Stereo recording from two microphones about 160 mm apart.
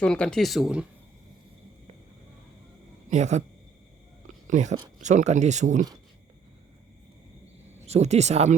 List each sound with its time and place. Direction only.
0.0 s speech: 5° left (ahead or behind)
3.1 s speech: 45° right (ahead or behind)
4.4 s speech: 50° right (ahead or behind)
7.9 s speech: 45° right (ahead or behind)